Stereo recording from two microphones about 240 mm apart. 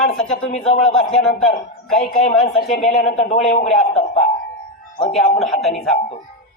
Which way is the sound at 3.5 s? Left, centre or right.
Left.